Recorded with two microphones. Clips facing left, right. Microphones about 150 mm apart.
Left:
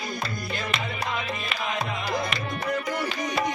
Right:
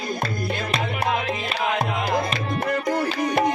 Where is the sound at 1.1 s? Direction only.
65° right (ahead or behind).